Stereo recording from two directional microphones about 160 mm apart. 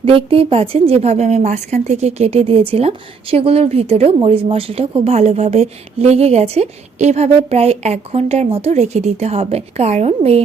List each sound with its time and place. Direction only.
0.0 s a woman's voice: 35° right (ahead or behind)